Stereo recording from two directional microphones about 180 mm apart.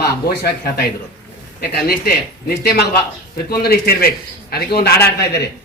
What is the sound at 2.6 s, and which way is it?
Speech, 60° left (ahead or behind).